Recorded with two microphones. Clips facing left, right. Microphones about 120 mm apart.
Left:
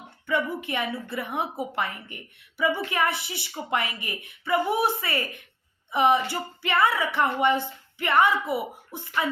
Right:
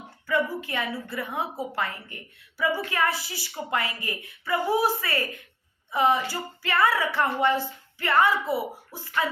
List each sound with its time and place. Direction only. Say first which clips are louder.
0.3 s speech: even; 25° left (ahead or behind)